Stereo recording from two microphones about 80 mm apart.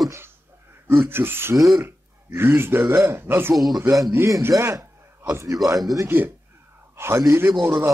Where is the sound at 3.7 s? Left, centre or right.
Right.